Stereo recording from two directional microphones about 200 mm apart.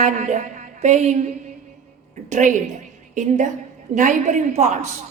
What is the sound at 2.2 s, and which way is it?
A woman's voice, 40° right (ahead or behind).